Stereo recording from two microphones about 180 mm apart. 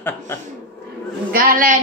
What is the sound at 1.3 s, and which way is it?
Speech, 50° right (ahead or behind).